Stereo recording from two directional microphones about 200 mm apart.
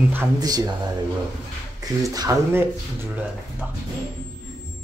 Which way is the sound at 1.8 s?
20° right (ahead or behind).